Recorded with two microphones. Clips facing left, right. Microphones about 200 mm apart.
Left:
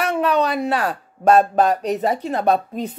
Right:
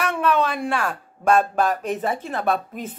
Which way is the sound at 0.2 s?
40° left (ahead or behind).